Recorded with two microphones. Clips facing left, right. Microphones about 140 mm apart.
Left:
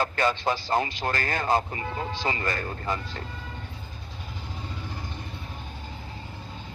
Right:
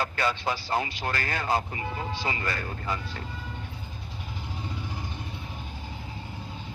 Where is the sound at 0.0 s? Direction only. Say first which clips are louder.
Left 3 dB; 45° left (ahead or behind).